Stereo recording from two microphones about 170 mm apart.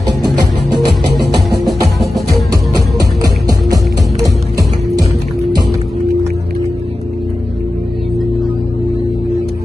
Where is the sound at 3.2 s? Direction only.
20° right (ahead or behind).